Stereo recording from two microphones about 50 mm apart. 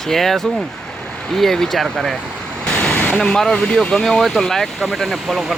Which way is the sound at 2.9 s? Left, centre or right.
Left.